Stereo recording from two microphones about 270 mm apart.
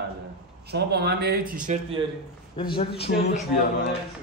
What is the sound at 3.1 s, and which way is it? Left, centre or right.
Speech, left.